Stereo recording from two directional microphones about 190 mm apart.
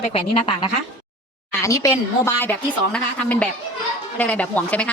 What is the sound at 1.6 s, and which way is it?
A woman's voice, 15° left (ahead or behind).